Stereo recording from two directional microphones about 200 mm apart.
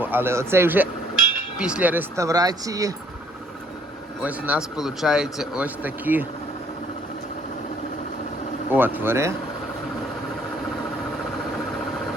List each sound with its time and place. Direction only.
0.0 s speech: 10° right (ahead or behind)
4.2 s speech: 5° right (ahead or behind)
8.7 s speech: 10° right (ahead or behind)